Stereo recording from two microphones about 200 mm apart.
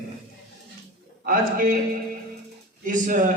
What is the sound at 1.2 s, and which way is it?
Speech, 45° right (ahead or behind).